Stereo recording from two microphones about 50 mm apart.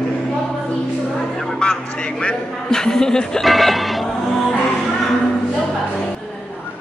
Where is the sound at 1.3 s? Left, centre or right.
Centre.